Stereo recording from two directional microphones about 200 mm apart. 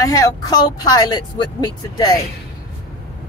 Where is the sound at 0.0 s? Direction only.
15° left (ahead or behind).